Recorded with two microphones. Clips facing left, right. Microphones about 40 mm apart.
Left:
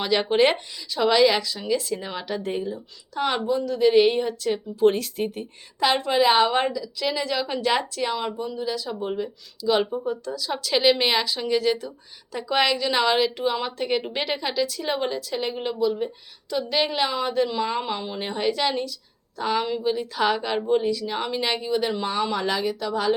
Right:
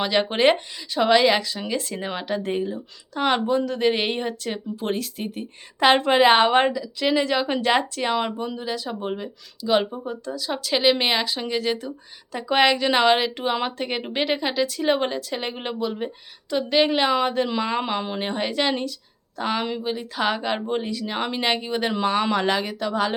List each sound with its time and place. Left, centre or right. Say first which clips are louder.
0.0 s speech: right 1 dB; centre
3.3 s a woman's voice: right 2 dB; right
4.9 s speech: left 4 dB; centre
6.0 s a woman's voice: even; right
8.1 s speech: right 3 dB; right
8.5 s speech: left 1 dB; right
10.1 s a woman's voice: left 2 dB; right
10.6 s speech: even; centre; by 13.8 s right
13.8 s a woman's voice: even; right
18.2 s speech: left 3 dB; right
19.4 s a woman's voice: left 1 dB; right
22.0 s a woman's voice: right 4 dB; right